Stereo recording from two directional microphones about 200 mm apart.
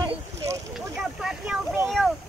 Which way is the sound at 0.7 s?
Centre (ahead or behind).